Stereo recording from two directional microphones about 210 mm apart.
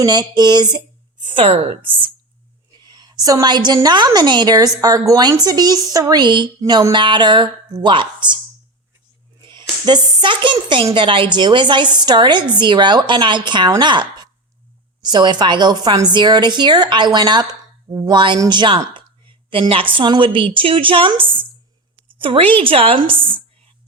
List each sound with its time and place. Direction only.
0.0 s a woman's voice: 20° right (ahead or behind)
9.5 s a woman's voice: 20° right (ahead or behind)